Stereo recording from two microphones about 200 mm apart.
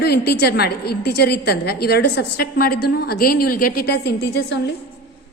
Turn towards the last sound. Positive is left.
turn(degrees=55)  # may be behind; listen again after turning